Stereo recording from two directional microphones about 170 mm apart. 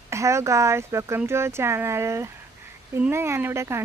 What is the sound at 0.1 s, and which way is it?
Speech, 15° right (ahead or behind).